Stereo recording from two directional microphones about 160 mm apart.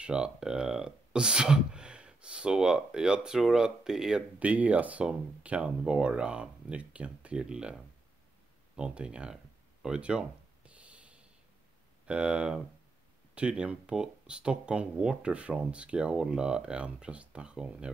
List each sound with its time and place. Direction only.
0.0 s speech: 5° right (ahead or behind)
8.7 s a sound: 5° right (ahead or behind)
12.1 s speech: 5° right (ahead or behind)